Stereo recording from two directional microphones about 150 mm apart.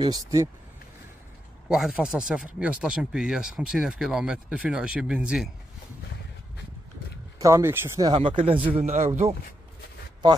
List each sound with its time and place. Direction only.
0.1 s speech: 20° right (ahead or behind)
1.7 s speech: 5° right (ahead or behind)
7.3 s speech: 20° right (ahead or behind)
8.1 s speech: 35° right (ahead or behind)
8.6 s a man's voice: 45° right (ahead or behind)
10.2 s speech: 30° right (ahead or behind)